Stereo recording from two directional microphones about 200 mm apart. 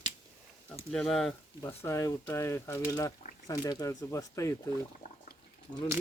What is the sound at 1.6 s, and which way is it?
Speech, 15° left (ahead or behind).